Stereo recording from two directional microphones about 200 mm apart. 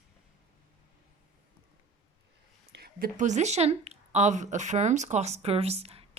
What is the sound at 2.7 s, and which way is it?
Speech, 50° right (ahead or behind).